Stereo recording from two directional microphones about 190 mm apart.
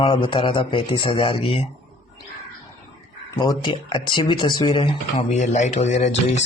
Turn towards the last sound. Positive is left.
turn(degrees=35)  # may be behind; listen again after turning